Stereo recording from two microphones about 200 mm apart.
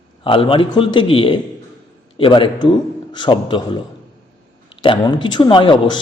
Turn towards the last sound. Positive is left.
turn(degrees=25)  # may be behind; listen again after turning